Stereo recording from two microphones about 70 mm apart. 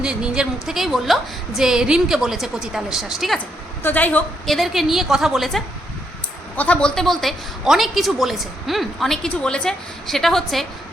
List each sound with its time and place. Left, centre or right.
0.0 s a woman's voice: centre
3.8 s a woman's voice: left
4.4 s a woman's voice: centre
6.6 s speech: centre
6.9 s a woman's voice: centre